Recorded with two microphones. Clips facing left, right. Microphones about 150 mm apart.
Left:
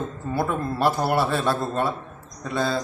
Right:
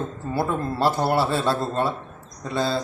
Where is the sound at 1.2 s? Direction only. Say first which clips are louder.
Right 1 dB; 25° right (ahead or behind).